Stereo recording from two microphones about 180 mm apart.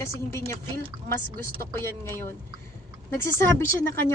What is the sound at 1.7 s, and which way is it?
Speech, 15° left (ahead or behind).